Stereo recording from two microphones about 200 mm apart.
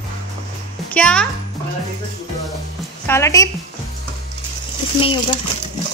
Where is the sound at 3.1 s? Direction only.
15° left (ahead or behind).